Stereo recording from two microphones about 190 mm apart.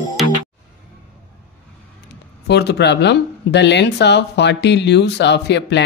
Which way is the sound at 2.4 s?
60° left (ahead or behind).